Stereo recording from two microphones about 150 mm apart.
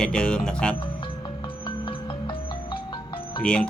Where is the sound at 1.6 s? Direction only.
35° left (ahead or behind).